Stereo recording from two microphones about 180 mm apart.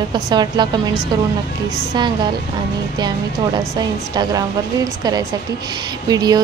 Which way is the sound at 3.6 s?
20° right (ahead or behind).